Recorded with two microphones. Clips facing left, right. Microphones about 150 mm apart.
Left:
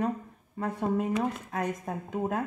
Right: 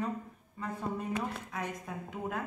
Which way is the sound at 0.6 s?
65° left (ahead or behind).